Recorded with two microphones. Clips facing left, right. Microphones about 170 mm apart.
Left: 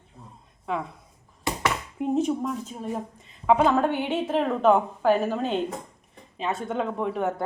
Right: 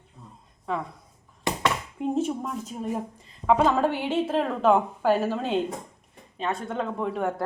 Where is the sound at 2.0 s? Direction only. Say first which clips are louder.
Left 3 dB; 5° right (ahead or behind).